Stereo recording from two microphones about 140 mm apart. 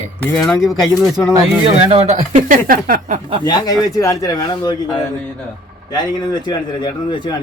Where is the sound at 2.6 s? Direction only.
85° right.